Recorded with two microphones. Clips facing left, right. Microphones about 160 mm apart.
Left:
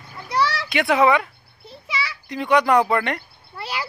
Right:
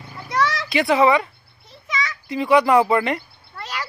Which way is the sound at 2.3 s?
5° right (ahead or behind).